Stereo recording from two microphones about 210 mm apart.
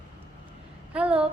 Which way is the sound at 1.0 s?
5° right (ahead or behind).